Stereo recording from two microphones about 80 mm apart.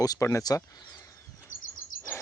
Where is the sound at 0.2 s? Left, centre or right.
Left.